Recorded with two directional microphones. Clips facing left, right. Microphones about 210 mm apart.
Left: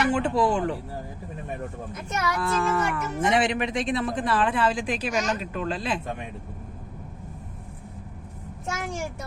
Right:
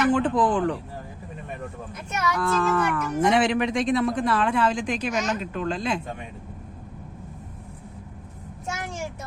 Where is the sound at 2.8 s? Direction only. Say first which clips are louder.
Right 2 dB; 25° left (ahead or behind).